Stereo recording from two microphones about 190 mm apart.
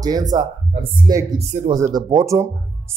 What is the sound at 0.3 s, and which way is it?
Speech, 20° right (ahead or behind).